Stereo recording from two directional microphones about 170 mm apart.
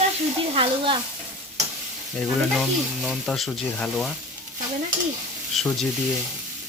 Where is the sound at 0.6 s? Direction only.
30° right (ahead or behind).